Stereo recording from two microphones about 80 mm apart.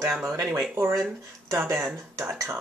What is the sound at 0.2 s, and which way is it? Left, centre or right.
Speech, right.